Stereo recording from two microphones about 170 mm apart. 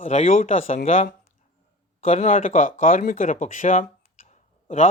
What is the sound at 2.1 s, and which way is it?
Speech, 45° left (ahead or behind).